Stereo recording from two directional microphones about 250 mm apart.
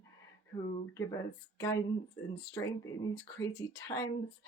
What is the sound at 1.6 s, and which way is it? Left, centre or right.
Speech, centre.